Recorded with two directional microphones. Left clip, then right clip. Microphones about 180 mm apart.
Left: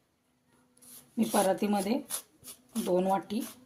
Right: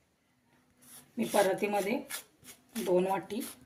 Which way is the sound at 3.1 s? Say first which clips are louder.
Left 3 dB; 65° left (ahead or behind).